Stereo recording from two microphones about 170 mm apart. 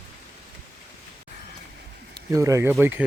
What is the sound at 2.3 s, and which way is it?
Speech, 20° right (ahead or behind).